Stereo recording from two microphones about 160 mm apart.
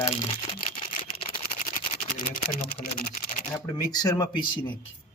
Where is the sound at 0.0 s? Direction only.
35° left (ahead or behind).